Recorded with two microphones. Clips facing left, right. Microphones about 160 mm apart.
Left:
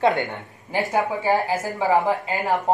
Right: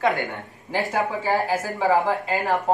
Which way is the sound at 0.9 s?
10° left (ahead or behind).